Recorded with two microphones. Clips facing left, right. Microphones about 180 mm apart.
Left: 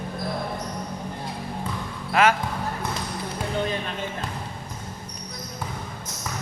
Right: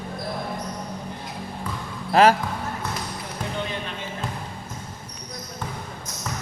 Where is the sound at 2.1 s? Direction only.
35° right (ahead or behind).